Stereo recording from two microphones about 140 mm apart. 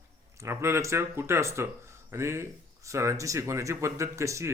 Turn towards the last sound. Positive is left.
turn(degrees=-20)  # may be behind; listen again after turning